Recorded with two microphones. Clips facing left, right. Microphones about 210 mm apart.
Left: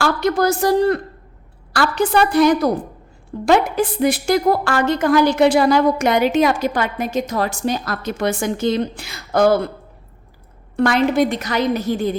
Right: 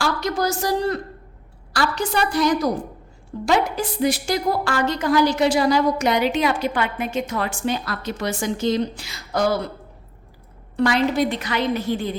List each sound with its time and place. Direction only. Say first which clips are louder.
0.0 s a woman's voice: left 5 dB; 55° left (ahead or behind)
10.8 s a woman's voice: left 3 dB; 50° left (ahead or behind)